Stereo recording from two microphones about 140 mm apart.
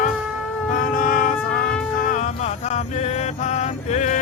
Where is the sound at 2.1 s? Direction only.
60° left (ahead or behind).